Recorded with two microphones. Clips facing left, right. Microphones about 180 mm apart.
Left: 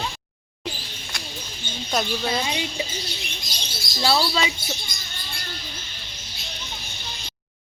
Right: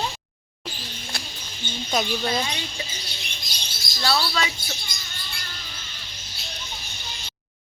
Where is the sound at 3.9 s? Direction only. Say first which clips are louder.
Left 3 dB; 25° left (ahead or behind).